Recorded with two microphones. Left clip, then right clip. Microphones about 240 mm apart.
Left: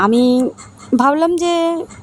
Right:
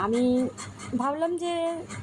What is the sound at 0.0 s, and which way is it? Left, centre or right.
Speech, left.